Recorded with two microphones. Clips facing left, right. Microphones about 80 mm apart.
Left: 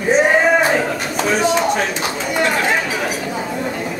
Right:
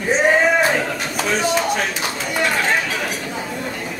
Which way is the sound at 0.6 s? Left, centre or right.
Centre.